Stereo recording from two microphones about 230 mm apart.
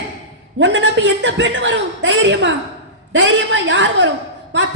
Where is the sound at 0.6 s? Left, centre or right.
Right.